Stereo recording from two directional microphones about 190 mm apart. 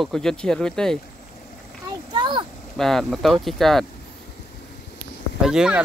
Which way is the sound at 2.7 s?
Centre (ahead or behind).